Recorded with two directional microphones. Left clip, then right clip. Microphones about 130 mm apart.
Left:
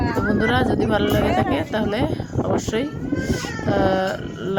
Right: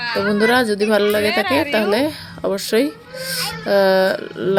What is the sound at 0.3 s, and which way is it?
A woman's voice, 30° right (ahead or behind).